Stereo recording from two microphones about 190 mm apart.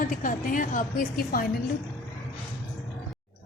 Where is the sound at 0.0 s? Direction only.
45° left (ahead or behind).